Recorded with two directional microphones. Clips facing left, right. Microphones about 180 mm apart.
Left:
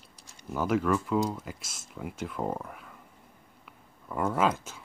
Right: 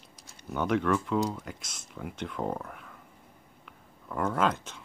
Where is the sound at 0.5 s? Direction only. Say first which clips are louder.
Even; 5° left (ahead or behind).